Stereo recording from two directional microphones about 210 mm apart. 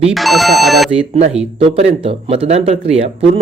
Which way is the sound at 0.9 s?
30° right (ahead or behind).